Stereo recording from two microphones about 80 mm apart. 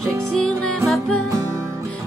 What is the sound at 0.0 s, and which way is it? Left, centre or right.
Music, centre.